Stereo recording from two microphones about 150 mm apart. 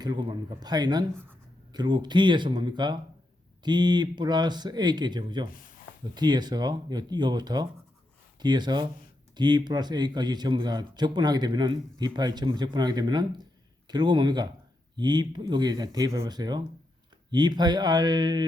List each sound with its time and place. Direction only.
0.0 s speech: 30° right (ahead or behind)